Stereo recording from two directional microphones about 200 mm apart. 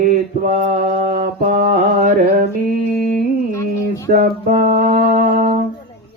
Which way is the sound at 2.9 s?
40° right (ahead or behind).